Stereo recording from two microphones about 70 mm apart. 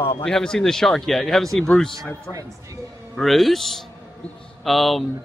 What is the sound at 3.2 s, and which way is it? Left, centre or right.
A man's voice, centre.